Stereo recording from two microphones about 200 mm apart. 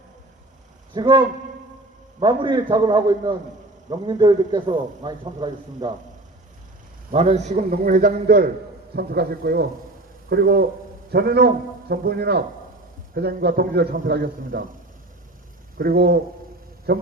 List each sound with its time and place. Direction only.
0.9 s a man's voice: 20° right (ahead or behind)
7.1 s a man's voice: 30° right (ahead or behind); by 14.7 s 45° right (ahead or behind)
15.8 s a man's voice: 50° right (ahead or behind)